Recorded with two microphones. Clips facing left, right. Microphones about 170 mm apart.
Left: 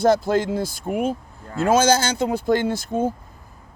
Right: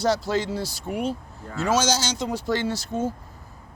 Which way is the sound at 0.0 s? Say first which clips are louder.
Left 5 dB; 50° left (ahead or behind).